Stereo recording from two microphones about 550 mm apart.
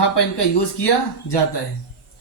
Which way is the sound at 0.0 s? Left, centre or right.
Left.